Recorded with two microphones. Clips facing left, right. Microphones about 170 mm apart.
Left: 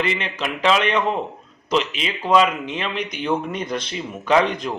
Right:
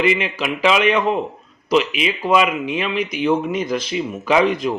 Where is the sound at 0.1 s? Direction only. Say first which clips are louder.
Right 5 dB; 10° right (ahead or behind).